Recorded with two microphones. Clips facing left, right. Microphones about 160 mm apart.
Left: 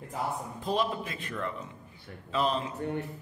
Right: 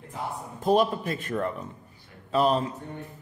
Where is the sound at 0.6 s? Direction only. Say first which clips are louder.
Right 8 dB; 45° right (ahead or behind).